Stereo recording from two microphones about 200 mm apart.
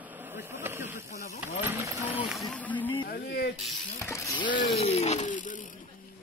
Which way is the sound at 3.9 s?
15° left (ahead or behind).